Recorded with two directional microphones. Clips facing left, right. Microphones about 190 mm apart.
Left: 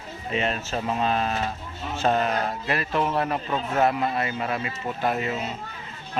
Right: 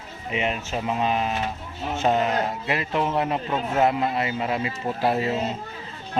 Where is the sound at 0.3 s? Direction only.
15° right (ahead or behind).